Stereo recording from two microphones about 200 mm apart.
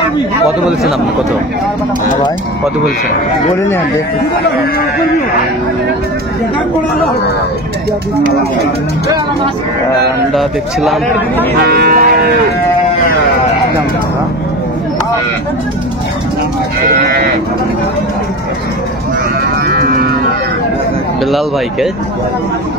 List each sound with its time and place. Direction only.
10.3 s speech: centre (ahead or behind)
11.6 s speech: 50° right (ahead or behind)
16.8 s speech: 45° right (ahead or behind)
19.7 s cattle: 50° right (ahead or behind)